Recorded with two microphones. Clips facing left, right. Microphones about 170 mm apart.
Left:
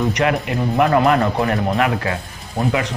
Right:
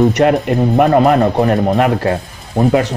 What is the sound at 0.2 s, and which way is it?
Speech, 40° right (ahead or behind).